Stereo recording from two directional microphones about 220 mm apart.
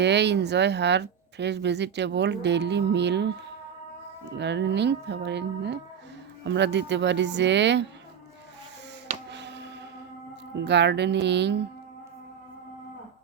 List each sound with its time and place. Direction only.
0.0 s speech: 50° right (ahead or behind)
9.3 s music: 50° right (ahead or behind)
10.6 s speech: 50° right (ahead or behind)